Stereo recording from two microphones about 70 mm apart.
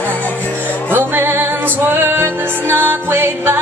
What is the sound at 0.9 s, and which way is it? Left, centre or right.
Music, right.